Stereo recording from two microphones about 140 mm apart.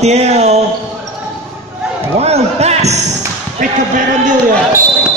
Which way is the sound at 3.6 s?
65° right (ahead or behind).